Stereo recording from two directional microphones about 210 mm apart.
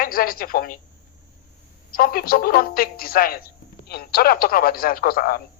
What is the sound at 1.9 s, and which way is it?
Speech, 45° left (ahead or behind).